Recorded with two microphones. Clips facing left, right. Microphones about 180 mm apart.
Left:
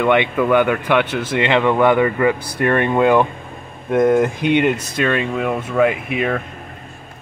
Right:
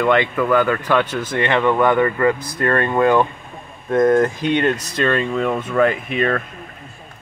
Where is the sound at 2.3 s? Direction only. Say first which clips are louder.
Even; 30° left (ahead or behind).